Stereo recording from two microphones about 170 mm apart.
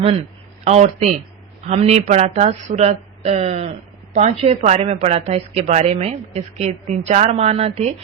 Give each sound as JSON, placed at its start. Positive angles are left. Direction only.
{"t": 0.0, "sound": "a man's voice", "side_deg": -35}